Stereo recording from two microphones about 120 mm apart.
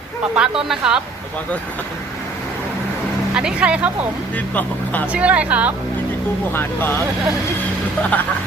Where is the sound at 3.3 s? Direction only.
10° right (ahead or behind).